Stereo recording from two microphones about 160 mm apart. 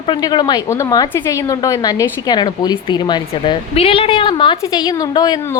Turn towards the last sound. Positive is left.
turn(degrees=25)  # may be behind; listen again after turning